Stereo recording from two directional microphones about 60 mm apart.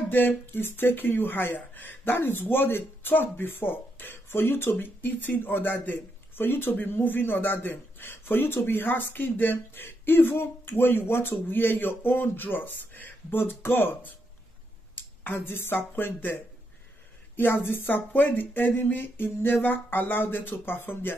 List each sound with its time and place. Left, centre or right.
0.1 s speech: left
17.6 s speech: left